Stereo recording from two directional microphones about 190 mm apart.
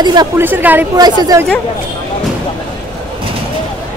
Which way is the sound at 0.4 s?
10° right (ahead or behind).